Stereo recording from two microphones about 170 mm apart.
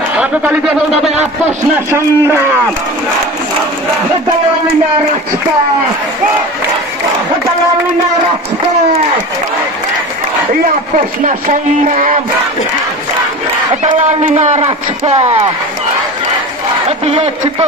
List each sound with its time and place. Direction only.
0.2 s a man's voice: 10° right (ahead or behind)
11.0 s speech: 50° right (ahead or behind)
13.9 s a man's voice: 45° right (ahead or behind)
17.0 s a man's voice: 35° right (ahead or behind)